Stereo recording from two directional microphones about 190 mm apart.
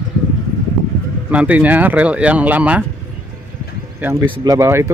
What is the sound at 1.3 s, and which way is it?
Speech, 5° right (ahead or behind).